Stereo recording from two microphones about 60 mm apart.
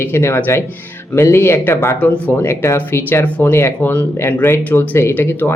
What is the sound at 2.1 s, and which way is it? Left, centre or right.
Speech, left.